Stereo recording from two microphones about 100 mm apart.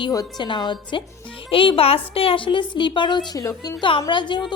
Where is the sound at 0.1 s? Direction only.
35° left (ahead or behind).